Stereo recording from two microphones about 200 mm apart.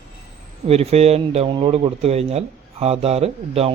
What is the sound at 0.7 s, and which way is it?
Speech, 30° right (ahead or behind).